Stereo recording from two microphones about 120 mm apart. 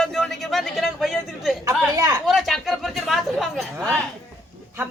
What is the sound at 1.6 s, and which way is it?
Speech, 30° right (ahead or behind).